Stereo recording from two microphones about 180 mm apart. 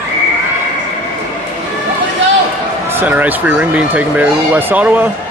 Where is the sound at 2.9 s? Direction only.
10° right (ahead or behind).